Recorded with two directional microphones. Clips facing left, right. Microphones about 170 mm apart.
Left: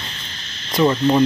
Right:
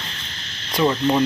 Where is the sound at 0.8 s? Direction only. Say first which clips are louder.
Left 3 dB; centre (ahead or behind).